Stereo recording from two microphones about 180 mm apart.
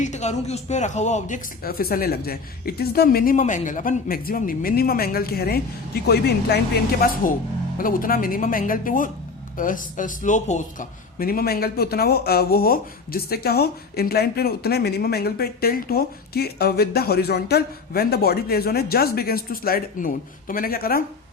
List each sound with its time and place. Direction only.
0.0 s speech: 40° left (ahead or behind)
1.6 s speech: 55° left (ahead or behind)